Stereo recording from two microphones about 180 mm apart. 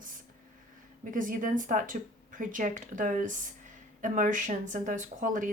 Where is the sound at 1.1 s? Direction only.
45° right (ahead or behind).